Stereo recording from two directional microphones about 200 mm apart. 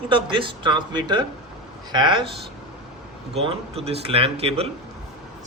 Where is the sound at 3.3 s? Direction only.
30° right (ahead or behind).